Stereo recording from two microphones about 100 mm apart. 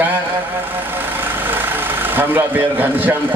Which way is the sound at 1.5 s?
20° right (ahead or behind).